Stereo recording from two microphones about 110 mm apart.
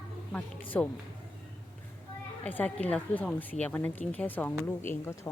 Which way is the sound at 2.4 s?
15° left (ahead or behind).